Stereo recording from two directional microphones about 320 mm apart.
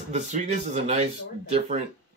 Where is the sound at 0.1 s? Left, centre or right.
Right.